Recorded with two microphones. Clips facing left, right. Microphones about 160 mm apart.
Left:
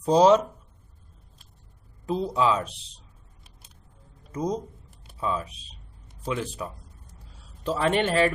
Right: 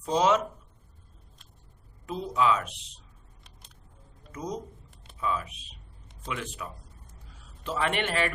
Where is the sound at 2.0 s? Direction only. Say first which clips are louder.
Left 3 dB; 35° left (ahead or behind).